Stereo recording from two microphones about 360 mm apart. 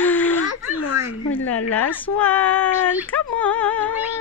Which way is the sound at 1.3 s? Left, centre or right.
Centre.